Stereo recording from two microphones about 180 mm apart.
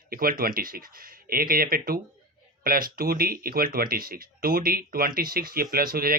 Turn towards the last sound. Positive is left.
turn(degrees=-55)  # may be behind; listen again after turning